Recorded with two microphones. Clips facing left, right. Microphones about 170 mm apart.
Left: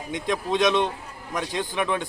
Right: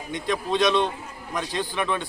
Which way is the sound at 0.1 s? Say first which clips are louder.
Even; 20° left (ahead or behind).